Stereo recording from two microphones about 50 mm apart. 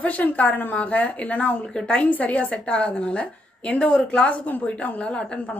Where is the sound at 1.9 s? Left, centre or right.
Left.